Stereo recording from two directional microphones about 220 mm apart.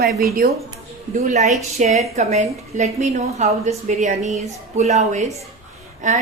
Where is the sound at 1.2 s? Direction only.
30° right (ahead or behind).